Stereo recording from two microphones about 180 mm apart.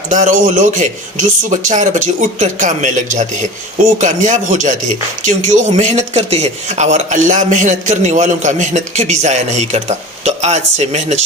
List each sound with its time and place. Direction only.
0.1 s speech: 45° right (ahead or behind)